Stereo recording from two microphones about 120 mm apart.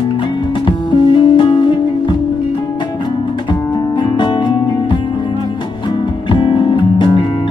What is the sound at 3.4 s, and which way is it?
Music, 40° left (ahead or behind).